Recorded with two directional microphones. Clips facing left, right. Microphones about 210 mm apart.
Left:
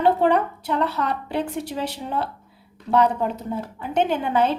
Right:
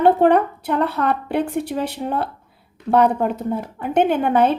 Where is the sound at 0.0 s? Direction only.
55° right (ahead or behind).